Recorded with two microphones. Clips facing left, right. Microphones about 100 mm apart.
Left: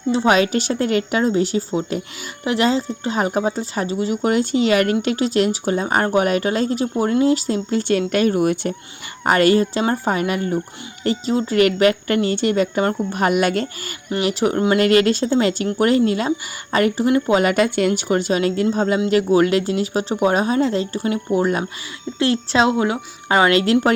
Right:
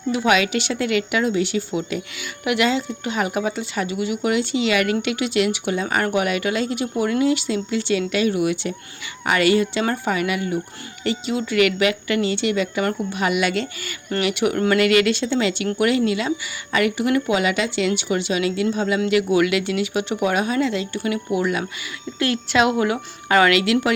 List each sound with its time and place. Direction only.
0.1 s speech: 35° left (ahead or behind)
23.5 s speech: 40° left (ahead or behind)